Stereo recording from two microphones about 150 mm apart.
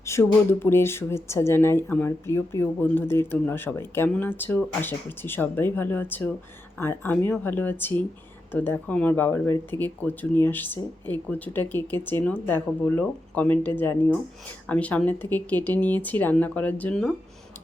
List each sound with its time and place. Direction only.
0.0 s speech: 15° left (ahead or behind)